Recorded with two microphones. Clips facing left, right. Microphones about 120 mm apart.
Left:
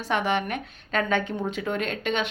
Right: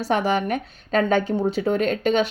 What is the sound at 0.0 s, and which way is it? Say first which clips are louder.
Speech: right 4 dB; 35° right (ahead or behind).